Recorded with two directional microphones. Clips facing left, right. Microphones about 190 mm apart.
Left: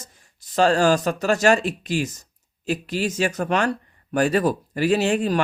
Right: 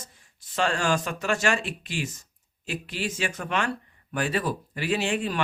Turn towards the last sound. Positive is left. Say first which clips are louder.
# left 7 dB
turn(degrees=40)  # may be behind; listen again after turning